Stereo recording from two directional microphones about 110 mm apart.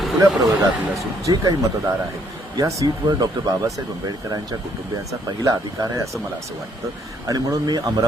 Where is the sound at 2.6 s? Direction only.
30° right (ahead or behind).